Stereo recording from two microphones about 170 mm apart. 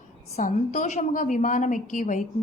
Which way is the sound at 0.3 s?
45° left (ahead or behind).